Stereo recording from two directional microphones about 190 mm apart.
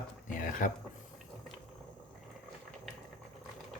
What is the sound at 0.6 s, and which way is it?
Speech, 45° left (ahead or behind).